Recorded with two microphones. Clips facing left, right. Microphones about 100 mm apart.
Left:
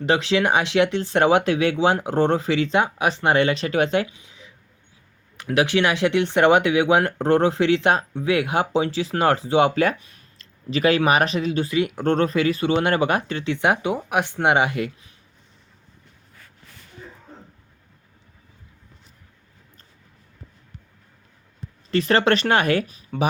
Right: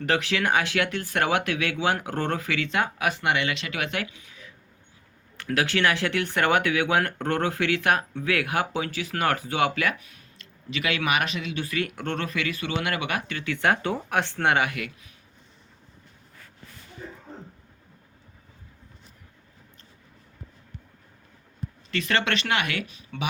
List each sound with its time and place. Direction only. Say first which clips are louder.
0.0 s speech: left 5 dB; 20° left (ahead or behind)
21.8 s speech: left 8 dB; 35° left (ahead or behind)